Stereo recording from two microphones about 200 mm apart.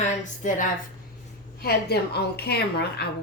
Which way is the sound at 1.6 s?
55° left (ahead or behind).